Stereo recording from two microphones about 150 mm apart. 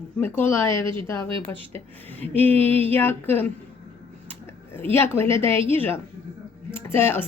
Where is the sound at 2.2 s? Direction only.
10° left (ahead or behind).